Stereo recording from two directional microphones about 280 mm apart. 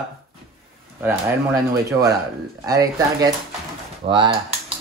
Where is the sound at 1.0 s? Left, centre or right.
Centre.